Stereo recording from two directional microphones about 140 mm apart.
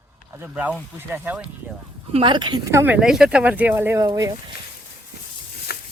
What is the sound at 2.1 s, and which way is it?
Speech, 35° right (ahead or behind).